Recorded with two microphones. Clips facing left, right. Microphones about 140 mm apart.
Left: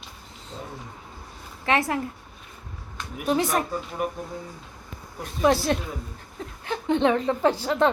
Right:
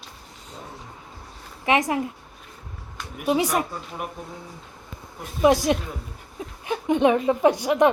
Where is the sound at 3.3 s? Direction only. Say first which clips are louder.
Right 1 dB; 15° right (ahead or behind).